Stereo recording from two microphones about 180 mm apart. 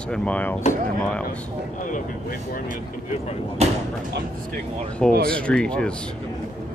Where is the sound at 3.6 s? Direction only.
35° right (ahead or behind).